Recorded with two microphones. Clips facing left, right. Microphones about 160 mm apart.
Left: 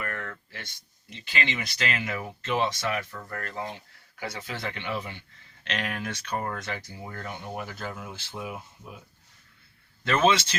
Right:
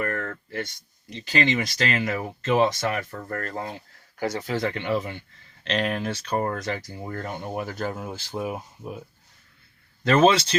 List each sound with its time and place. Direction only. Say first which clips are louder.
0.0 s a sound: right 7 dB; 45° right (ahead or behind)
1.1 s speech: right 8 dB; 40° right (ahead or behind)
5.6 s speech: right 7 dB; 35° right (ahead or behind)
10.0 s speech: right 5 dB; 40° right (ahead or behind)